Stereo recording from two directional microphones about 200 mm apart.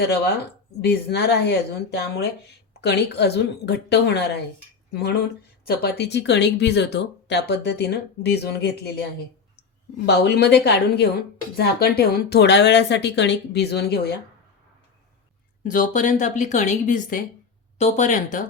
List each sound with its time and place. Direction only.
0.8 s speech: 55° left (ahead or behind)
10.1 s speech: 55° left (ahead or behind)
15.6 s speech: 40° left (ahead or behind)